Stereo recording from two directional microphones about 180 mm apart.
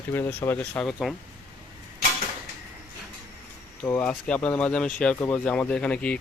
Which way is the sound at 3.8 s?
10° left (ahead or behind).